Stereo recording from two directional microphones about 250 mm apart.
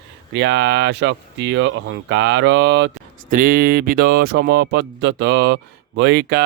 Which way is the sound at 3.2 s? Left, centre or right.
Right.